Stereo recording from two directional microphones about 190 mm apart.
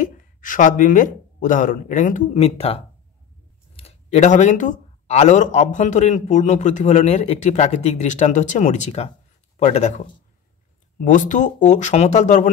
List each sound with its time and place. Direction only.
0.0 s speech: 45° left (ahead or behind)